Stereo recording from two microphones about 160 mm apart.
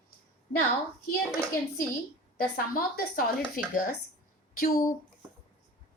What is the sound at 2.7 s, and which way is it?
Speech, 60° left (ahead or behind).